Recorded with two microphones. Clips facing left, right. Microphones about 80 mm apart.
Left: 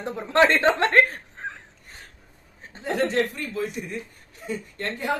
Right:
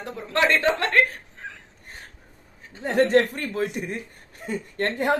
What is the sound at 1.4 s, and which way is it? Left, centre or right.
Crow, left.